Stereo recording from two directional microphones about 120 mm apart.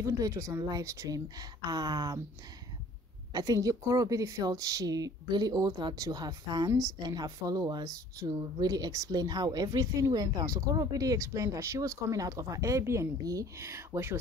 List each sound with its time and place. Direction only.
0.0 s speech: 25° right (ahead or behind)
3.3 s speech: 30° right (ahead or behind)